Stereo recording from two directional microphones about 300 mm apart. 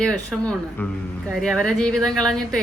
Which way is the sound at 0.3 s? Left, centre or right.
Centre.